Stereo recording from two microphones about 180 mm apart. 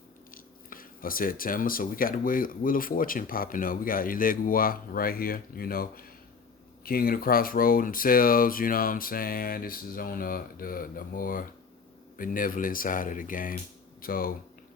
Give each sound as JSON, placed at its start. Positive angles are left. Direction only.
{"t": 0.3, "sound": "speech", "side_deg": 50}